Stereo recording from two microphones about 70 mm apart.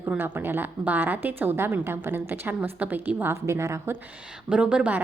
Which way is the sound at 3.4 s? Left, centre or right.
Right.